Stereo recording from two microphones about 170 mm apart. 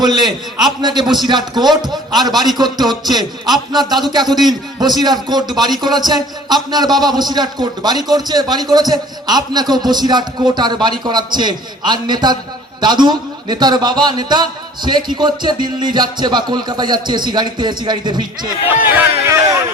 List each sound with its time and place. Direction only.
0.0 s a man's voice: 25° right (ahead or behind)
18.9 s speech: 10° right (ahead or behind)